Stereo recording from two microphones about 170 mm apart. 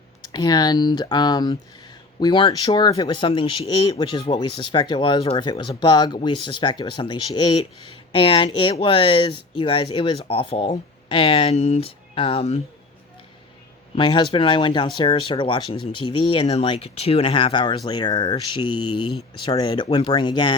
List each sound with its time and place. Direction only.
0.3 s speech: 25° left (ahead or behind)
13.9 s speech: 30° left (ahead or behind)